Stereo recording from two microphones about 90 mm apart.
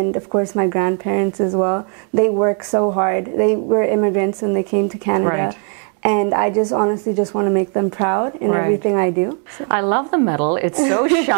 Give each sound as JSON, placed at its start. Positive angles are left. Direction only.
{"t": 0.0, "sound": "a woman's voice", "side_deg": -25}